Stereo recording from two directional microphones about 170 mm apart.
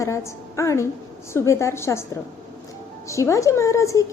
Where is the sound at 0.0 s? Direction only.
15° left (ahead or behind).